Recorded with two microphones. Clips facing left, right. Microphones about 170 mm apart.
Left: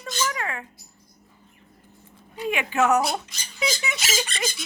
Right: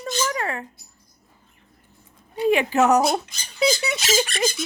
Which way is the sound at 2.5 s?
35° right (ahead or behind).